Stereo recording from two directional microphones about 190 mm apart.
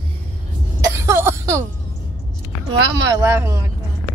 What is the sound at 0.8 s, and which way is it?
Throat clearing, 15° right (ahead or behind).